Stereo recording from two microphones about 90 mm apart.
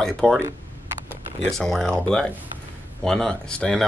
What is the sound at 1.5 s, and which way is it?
Speech, 5° left (ahead or behind).